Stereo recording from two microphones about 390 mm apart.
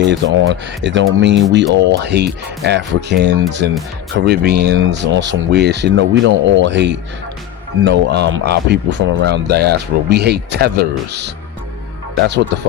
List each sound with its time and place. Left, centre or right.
0.0 s speech: right
12.5 s speech: right